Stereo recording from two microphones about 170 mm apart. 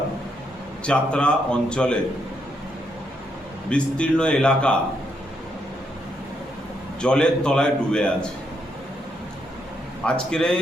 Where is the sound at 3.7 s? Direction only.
5° left (ahead or behind).